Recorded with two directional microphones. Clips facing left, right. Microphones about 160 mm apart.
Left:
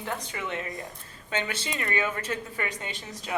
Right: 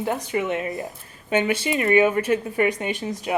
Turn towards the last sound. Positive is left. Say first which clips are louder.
# right 11 dB
turn(degrees=-10)  # may be behind; listen again after turning